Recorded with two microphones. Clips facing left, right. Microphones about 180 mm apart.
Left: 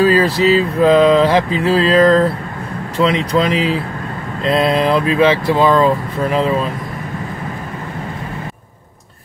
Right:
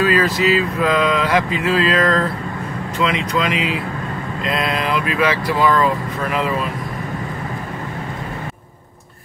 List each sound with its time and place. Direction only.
0.0 s speech: 30° left (ahead or behind)